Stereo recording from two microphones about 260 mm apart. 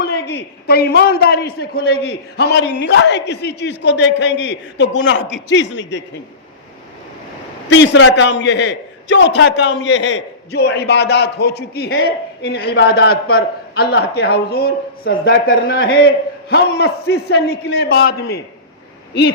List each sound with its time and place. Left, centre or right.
0.0 s a sound: left
0.7 s a man's voice: left
7.7 s a man's voice: left